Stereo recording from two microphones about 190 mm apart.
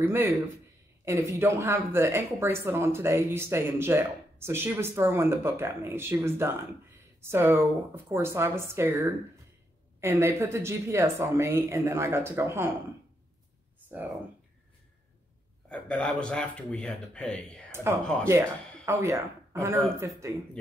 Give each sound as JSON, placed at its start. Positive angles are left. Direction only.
{"t": 0.0, "sound": "speech", "side_deg": -10}
{"t": 13.9, "sound": "speech", "side_deg": -10}
{"t": 15.7, "sound": "speech", "side_deg": 5}
{"t": 17.6, "sound": "a sound", "side_deg": -10}
{"t": 18.2, "sound": "speech", "side_deg": -15}